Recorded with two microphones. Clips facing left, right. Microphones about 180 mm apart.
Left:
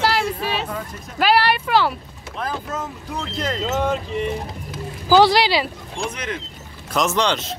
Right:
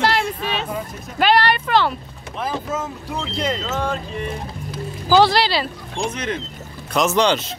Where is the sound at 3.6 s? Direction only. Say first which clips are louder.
Left 3 dB; 15° left (ahead or behind).